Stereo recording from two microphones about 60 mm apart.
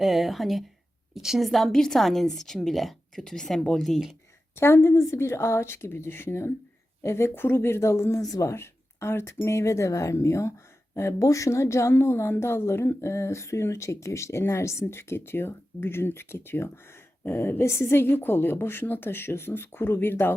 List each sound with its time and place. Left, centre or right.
0.0 s a woman's voice: centre
4.5 s a woman's voice: left
8.2 s speech: left
8.4 s a woman's voice: left